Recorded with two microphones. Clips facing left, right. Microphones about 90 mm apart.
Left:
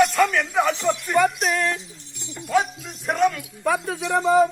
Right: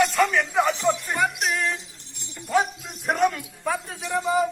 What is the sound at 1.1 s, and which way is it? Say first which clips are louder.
Speech: left 5 dB; 65° left (ahead or behind).